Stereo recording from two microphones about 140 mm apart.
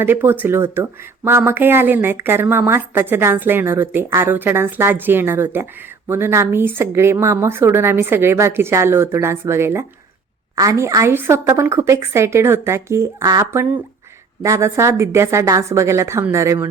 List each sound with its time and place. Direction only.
0.0 s a woman's voice: 15° right (ahead or behind)